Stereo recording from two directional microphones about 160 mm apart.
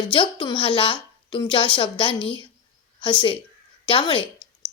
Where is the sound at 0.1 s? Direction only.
30° left (ahead or behind).